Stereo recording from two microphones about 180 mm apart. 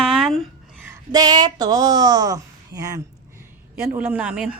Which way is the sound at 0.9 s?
20° right (ahead or behind).